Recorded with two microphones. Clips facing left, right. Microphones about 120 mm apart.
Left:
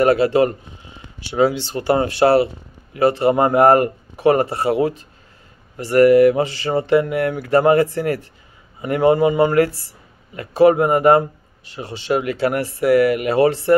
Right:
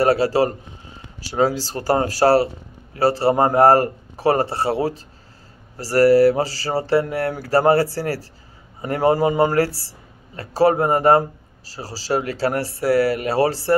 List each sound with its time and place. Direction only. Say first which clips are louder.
0.0 s speech: left 2 dB; 35° right (ahead or behind)